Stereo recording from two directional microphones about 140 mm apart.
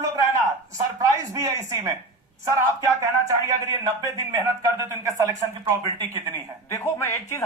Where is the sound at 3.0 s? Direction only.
25° right (ahead or behind).